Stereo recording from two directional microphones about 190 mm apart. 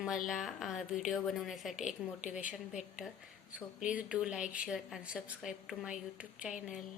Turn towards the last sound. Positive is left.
turn(degrees=-5)  # may be behind; listen again after turning